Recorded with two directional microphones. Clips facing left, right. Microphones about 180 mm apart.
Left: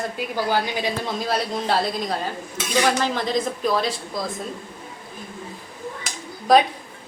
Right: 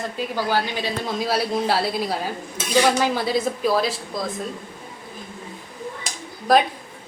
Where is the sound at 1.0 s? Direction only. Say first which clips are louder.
Right 2 dB; centre (ahead or behind).